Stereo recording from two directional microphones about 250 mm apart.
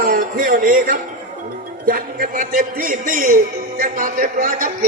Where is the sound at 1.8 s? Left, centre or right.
Right.